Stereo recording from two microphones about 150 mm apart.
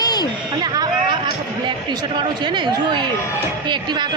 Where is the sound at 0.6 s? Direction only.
25° right (ahead or behind).